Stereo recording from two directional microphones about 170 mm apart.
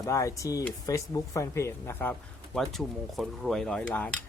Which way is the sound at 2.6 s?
Centre (ahead or behind).